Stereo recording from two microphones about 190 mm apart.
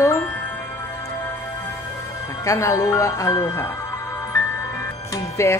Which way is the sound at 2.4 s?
15° left (ahead or behind).